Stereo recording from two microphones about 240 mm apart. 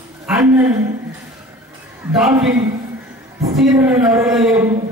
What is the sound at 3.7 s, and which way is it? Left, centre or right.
A man's voice, centre.